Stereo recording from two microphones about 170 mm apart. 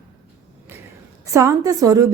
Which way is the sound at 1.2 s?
15° right (ahead or behind).